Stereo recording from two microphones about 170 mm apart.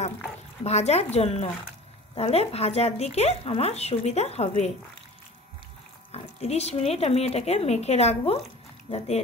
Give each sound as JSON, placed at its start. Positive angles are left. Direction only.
{"t": 0.7, "sound": "speech", "side_deg": 40}
{"t": 6.1, "sound": "speech", "side_deg": 40}